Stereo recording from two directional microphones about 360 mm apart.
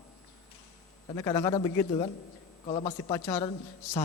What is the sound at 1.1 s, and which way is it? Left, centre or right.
A man's voice, centre.